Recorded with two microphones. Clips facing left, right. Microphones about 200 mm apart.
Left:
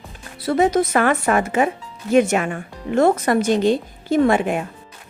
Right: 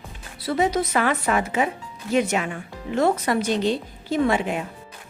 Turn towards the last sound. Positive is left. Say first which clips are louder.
# left 5 dB
turn(degrees=50)  # may be behind; listen again after turning